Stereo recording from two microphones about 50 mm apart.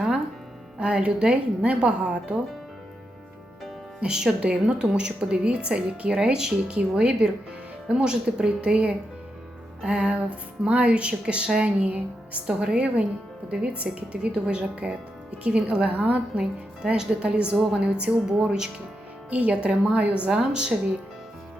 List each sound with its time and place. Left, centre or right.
0.8 s speech: right
4.0 s speech: centre; by 12.5 s right
12.5 s speech: centre
15.9 s a woman's voice: right
16.4 s speech: centre
19.3 s speech: right